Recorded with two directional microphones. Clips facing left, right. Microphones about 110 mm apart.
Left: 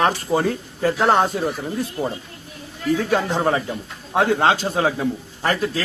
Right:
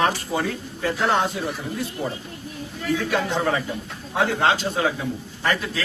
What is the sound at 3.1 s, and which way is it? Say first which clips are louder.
A man's voice: left 3 dB; 35° left (ahead or behind).